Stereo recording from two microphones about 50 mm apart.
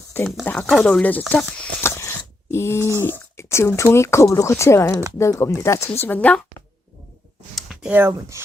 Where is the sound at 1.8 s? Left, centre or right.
Left.